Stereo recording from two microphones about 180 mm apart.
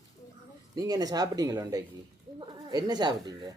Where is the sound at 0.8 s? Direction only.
20° right (ahead or behind).